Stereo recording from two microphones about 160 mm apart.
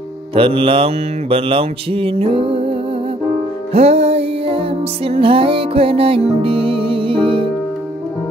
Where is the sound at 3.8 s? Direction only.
40° right (ahead or behind).